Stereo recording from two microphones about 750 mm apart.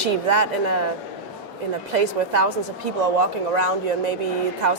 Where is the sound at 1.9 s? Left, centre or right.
Right.